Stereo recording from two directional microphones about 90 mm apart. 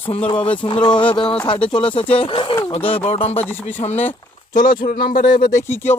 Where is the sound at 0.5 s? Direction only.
70° left (ahead or behind).